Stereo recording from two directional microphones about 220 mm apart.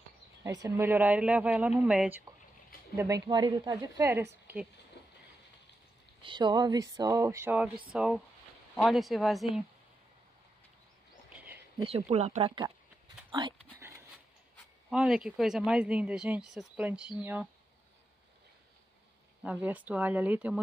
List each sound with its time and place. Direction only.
0.4 s a man's voice: 15° right (ahead or behind)
3.0 s a man's voice: 15° right (ahead or behind)
5.0 s a sound: 50° left (ahead or behind)
6.2 s a man's voice: 20° right (ahead or behind); by 9.5 s centre (ahead or behind)
11.3 s a sound: 10° right (ahead or behind)
11.8 s speech: 30° right (ahead or behind)
13.7 s dog: 15° right (ahead or behind)
14.9 s a man's voice: 5° right (ahead or behind)
19.4 s a man's voice: 5° right (ahead or behind)